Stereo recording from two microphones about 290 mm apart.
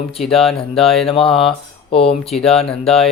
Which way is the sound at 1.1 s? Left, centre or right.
Centre.